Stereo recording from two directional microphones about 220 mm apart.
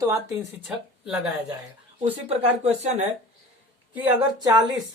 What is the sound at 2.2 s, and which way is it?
Speech, 30° right (ahead or behind).